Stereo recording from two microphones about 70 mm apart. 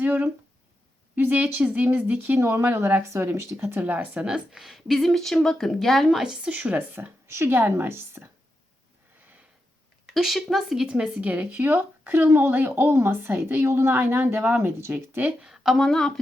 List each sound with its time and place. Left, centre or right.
0.0 s speech: right
2.4 s a woman's voice: right
2.6 s a woman's voice: right
3.8 s speech: right
4.5 s speech: centre
6.2 s a woman's voice: centre; by 8.3 s right
10.1 s speech: centre
10.8 s speech: centre; by 14.9 s right
15.4 s speech: centre